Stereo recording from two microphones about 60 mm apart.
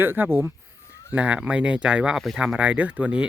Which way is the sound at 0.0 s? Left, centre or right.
Right.